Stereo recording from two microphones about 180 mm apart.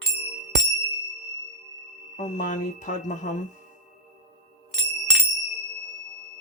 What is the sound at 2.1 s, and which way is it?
Speech, 40° left (ahead or behind).